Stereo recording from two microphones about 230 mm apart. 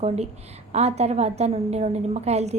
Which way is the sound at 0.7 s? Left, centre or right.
Right.